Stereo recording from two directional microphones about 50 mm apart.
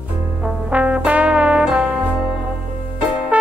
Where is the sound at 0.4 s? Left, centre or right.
Right.